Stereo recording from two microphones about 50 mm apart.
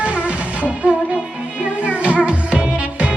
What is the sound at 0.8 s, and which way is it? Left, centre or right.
Music, right.